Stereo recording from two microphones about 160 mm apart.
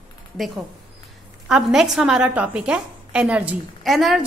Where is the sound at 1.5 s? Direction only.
5° right (ahead or behind).